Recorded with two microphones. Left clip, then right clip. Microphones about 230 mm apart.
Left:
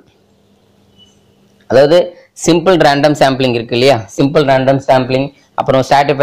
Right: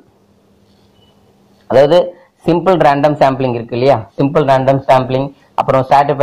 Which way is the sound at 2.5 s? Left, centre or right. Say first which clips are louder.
Left 1 dB; left.